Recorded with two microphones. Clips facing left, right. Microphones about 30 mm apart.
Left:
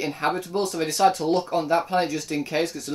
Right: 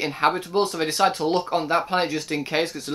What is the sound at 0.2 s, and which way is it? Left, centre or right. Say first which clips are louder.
Speech: right 5 dB; right.